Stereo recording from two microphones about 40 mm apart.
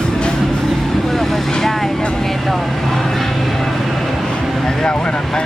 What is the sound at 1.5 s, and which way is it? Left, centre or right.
Speech, centre.